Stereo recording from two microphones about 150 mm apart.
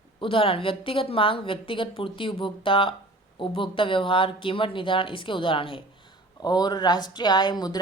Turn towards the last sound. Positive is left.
turn(degrees=25)  # may be behind; listen again after turning